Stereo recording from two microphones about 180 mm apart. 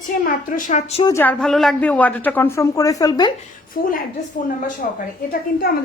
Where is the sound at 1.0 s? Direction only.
15° left (ahead or behind).